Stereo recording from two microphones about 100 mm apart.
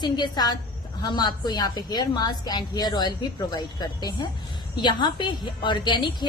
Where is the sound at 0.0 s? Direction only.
45° left (ahead or behind).